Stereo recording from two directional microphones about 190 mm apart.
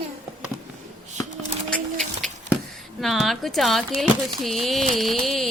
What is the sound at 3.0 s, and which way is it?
Speech, centre (ahead or behind).